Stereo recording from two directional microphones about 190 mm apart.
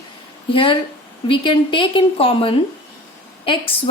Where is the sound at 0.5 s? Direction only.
25° left (ahead or behind).